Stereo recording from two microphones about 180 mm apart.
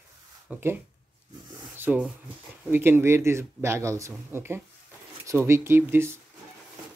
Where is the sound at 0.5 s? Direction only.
15° right (ahead or behind).